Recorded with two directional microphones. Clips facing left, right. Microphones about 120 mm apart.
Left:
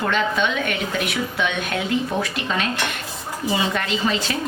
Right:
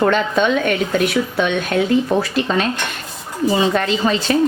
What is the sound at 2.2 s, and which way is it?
A woman's voice, 35° right (ahead or behind).